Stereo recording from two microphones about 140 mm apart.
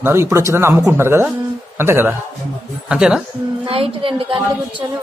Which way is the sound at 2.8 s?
5° right (ahead or behind).